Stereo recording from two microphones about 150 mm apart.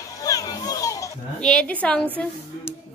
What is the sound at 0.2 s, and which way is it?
Children playing, 25° left (ahead or behind).